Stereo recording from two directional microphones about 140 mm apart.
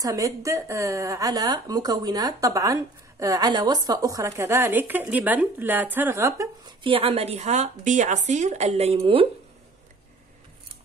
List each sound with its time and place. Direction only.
0.0 s speech: 25° right (ahead or behind)
6.8 s speech: 40° right (ahead or behind)